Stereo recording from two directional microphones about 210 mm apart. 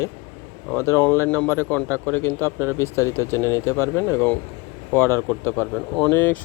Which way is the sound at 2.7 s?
10° left (ahead or behind).